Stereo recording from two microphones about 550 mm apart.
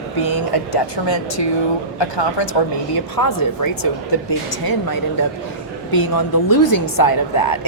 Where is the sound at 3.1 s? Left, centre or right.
Left.